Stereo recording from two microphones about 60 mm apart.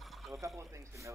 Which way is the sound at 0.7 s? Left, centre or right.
Right.